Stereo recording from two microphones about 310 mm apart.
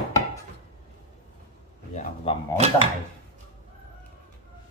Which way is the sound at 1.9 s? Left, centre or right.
Left.